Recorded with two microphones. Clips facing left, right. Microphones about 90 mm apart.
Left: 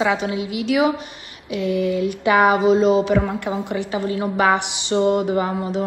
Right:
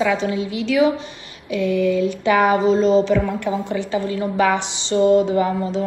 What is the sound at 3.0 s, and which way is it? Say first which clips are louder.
Speech: even; 45° left (ahead or behind).